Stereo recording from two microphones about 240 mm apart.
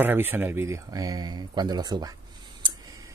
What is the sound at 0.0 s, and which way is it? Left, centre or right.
Speech, centre.